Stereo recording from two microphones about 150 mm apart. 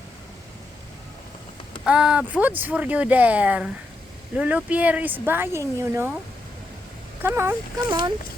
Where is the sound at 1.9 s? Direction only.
5° right (ahead or behind).